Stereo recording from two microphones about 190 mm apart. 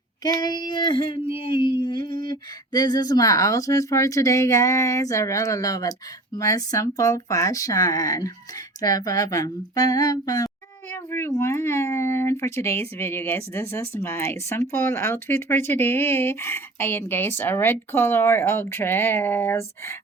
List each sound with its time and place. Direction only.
0.2 s speech: 20° left (ahead or behind)